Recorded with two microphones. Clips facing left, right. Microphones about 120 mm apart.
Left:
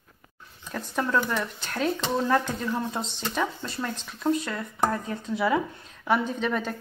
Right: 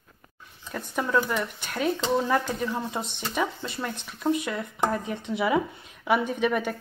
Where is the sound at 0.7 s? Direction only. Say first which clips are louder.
Left 1 dB; 5° right (ahead or behind).